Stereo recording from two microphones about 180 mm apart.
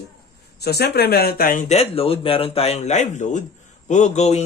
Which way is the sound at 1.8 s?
30° left (ahead or behind).